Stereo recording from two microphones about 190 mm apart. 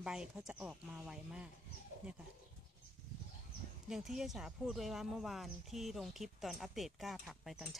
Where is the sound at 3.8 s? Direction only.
Centre (ahead or behind).